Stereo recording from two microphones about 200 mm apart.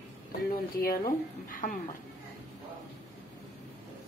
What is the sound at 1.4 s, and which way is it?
Speech, 40° left (ahead or behind).